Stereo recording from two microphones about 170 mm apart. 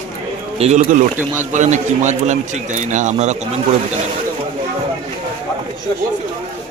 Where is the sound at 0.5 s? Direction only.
40° right (ahead or behind).